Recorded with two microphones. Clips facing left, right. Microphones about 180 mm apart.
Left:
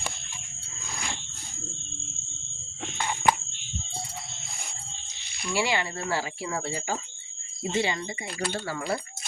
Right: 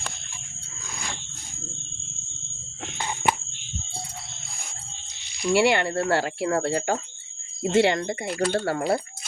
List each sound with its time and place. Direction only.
5.5 s speech: 60° right (ahead or behind)